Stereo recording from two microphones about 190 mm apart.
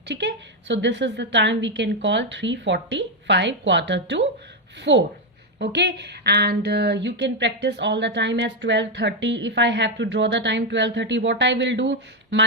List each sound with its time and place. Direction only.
0.1 s speech: 65° right (ahead or behind)